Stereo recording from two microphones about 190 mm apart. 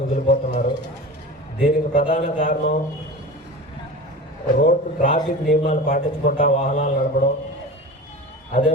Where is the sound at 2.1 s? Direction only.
40° left (ahead or behind).